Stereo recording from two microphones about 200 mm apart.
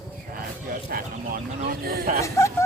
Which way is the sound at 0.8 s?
45° right (ahead or behind).